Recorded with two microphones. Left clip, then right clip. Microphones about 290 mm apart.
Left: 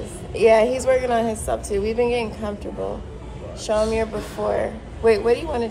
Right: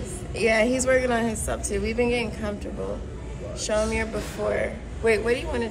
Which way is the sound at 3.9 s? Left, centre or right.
Left.